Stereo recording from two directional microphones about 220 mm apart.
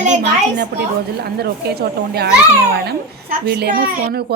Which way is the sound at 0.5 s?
50° right (ahead or behind).